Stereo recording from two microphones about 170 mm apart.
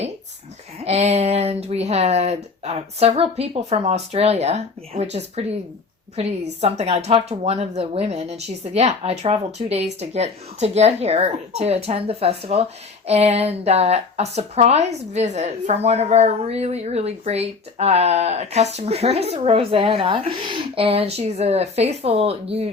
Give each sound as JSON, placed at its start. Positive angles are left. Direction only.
{"t": 0.9, "sound": "speech", "side_deg": -40}